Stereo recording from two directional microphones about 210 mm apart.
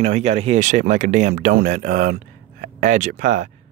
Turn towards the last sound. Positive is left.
turn(degrees=-35)  # may be behind; listen again after turning